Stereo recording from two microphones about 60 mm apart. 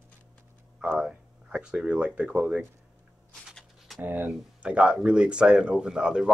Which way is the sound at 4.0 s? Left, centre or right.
Right.